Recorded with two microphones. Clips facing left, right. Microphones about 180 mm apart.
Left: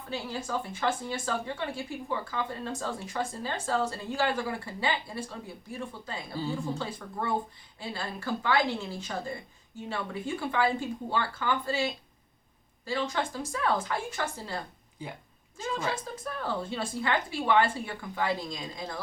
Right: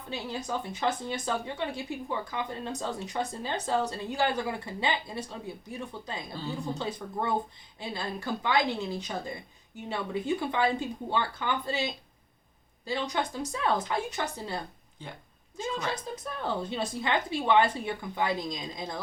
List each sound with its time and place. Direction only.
0.1 s a woman's voice: 20° right (ahead or behind)
6.4 s speech: 10° left (ahead or behind)
6.7 s a woman's voice: 20° right (ahead or behind)
16.4 s a woman's voice: 20° right (ahead or behind)